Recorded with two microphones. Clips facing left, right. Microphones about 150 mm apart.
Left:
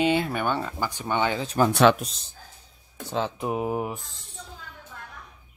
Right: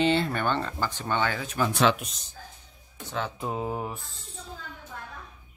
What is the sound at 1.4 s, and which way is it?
Speech, 35° left (ahead or behind).